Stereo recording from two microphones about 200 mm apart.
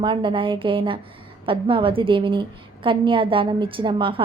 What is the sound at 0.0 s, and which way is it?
A woman's voice, 25° right (ahead or behind).